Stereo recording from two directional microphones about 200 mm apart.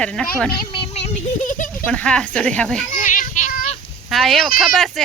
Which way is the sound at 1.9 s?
5° left (ahead or behind).